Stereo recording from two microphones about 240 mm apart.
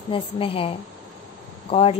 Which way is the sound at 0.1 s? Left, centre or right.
Left.